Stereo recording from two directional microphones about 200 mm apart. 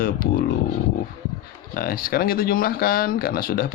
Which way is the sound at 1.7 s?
45° left (ahead or behind).